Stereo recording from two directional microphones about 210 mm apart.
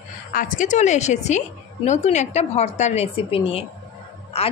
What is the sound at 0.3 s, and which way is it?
A woman's voice, 40° left (ahead or behind).